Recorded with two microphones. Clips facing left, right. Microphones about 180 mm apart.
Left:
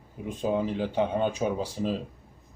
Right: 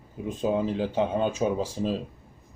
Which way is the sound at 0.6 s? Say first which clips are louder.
Right 1 dB; 30° right (ahead or behind).